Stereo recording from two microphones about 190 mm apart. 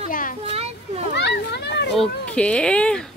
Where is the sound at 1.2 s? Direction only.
65° left (ahead or behind).